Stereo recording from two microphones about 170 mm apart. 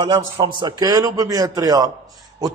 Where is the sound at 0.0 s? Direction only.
30° right (ahead or behind).